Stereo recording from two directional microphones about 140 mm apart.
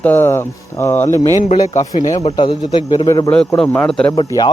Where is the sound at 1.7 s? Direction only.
60° left (ahead or behind).